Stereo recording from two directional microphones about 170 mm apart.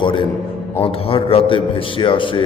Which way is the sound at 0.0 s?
30° left (ahead or behind).